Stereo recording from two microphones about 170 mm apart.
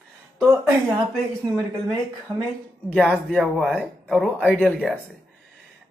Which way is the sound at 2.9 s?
5° left (ahead or behind).